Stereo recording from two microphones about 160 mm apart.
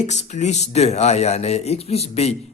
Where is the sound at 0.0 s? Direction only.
45° left (ahead or behind).